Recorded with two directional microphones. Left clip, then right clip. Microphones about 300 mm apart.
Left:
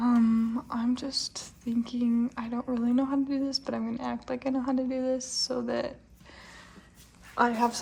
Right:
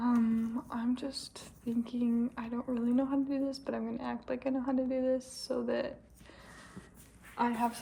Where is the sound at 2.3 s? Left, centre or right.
Left.